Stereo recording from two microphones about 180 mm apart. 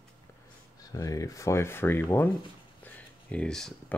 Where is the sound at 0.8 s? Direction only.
20° left (ahead or behind).